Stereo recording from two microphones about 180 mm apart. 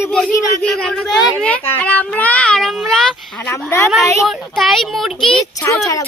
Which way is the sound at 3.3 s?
15° left (ahead or behind).